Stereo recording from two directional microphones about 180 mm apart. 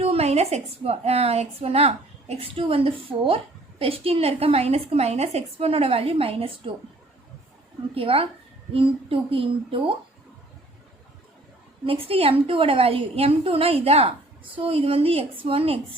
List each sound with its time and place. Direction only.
0.0 s a woman's voice: 35° right (ahead or behind)
7.9 s a woman's voice: 30° right (ahead or behind)
11.9 s a woman's voice: 30° right (ahead or behind)